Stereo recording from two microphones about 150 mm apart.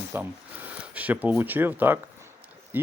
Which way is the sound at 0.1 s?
15° right (ahead or behind).